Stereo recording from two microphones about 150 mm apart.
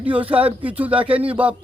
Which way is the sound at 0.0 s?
10° right (ahead or behind).